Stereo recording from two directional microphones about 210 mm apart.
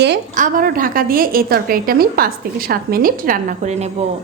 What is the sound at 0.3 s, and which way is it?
A woman's voice, 40° right (ahead or behind).